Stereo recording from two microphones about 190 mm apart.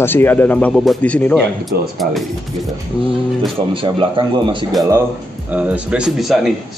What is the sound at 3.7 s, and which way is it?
Speech, 25° right (ahead or behind).